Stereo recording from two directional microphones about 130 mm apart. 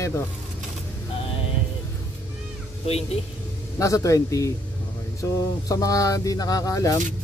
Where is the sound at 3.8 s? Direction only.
25° left (ahead or behind).